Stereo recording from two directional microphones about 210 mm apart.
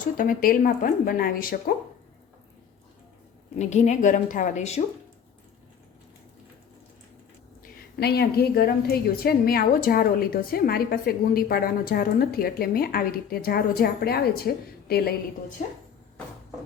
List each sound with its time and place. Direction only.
0.2 s a woman's voice: 40° left (ahead or behind)
3.5 s a woman's voice: 35° left (ahead or behind)
7.6 s a woman's voice: 50° left (ahead or behind)